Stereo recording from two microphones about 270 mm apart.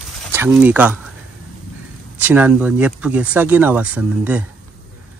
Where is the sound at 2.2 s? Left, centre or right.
Centre.